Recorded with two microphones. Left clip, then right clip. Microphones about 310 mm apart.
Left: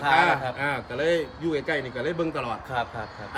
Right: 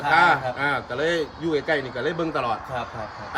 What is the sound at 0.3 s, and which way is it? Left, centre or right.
A man's voice, centre.